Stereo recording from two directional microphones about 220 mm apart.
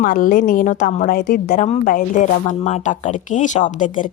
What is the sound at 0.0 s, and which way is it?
Speech, 40° left (ahead or behind).